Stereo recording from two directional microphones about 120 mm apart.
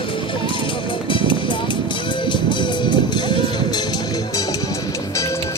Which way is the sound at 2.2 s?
40° left (ahead or behind).